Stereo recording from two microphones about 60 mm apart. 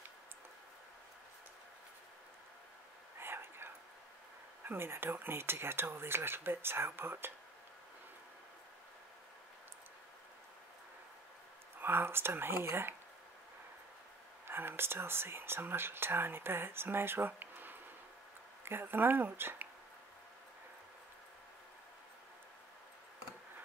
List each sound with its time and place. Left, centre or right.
3.2 s whispering: right
4.6 s speech: right
11.8 s speech: right
14.5 s speech: right